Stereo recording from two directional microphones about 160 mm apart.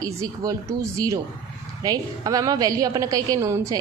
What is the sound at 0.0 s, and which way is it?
A woman's voice, 20° right (ahead or behind).